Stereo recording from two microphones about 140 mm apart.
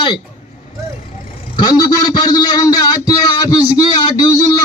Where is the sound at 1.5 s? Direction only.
30° left (ahead or behind).